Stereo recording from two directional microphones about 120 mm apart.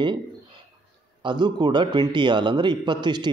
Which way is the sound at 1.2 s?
35° right (ahead or behind).